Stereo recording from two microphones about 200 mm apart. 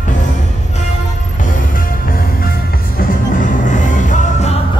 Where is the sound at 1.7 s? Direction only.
45° left (ahead or behind).